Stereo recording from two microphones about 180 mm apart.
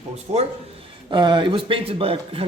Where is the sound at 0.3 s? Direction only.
35° right (ahead or behind).